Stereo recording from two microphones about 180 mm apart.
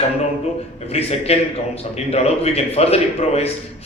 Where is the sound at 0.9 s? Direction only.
35° left (ahead or behind).